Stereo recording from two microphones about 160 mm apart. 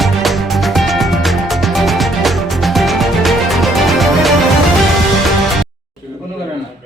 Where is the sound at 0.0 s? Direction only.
Centre (ahead or behind).